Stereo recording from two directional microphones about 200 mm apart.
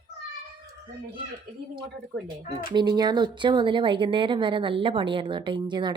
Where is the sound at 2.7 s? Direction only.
20° right (ahead or behind).